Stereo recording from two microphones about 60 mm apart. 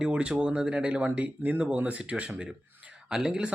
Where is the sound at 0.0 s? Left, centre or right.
Centre.